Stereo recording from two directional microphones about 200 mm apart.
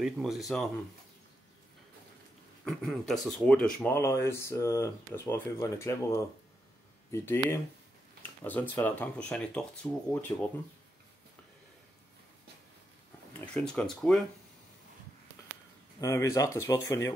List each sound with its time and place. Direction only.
0.0 s speech: centre (ahead or behind)
2.6 s speech: 5° left (ahead or behind)
13.5 s speech: 5° left (ahead or behind)
16.0 s speech: 15° left (ahead or behind)